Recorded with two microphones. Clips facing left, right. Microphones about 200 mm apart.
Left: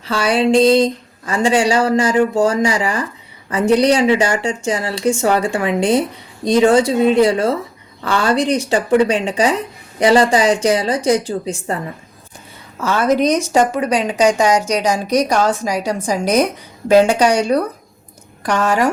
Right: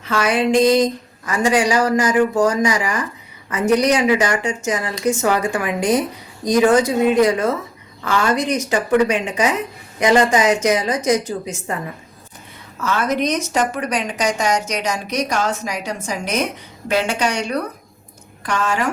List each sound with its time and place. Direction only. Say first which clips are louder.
0.0 s a woman's voice: left 2 dB; 35° left (ahead or behind)
12.8 s a woman's voice: left 5 dB; 30° left (ahead or behind)